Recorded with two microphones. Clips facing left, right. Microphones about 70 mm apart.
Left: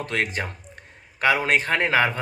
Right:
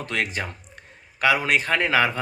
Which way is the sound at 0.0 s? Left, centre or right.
Left.